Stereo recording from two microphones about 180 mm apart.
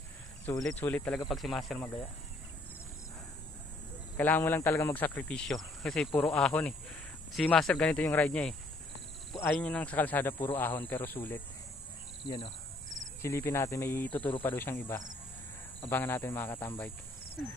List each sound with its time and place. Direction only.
0.6 s speech: 5° left (ahead or behind)
4.2 s speech: 10° left (ahead or behind)
9.6 s speech: 5° left (ahead or behind)
12.3 s speech: 25° left (ahead or behind)
13.2 s speech: 15° left (ahead or behind)